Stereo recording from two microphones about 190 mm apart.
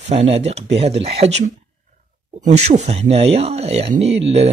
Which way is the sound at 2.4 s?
35° right (ahead or behind).